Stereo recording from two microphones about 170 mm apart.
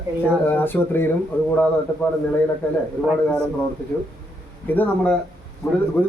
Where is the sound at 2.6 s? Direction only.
10° left (ahead or behind).